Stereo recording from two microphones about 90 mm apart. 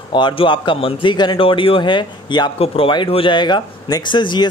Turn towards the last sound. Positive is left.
turn(degrees=60)  # may be behind; listen again after turning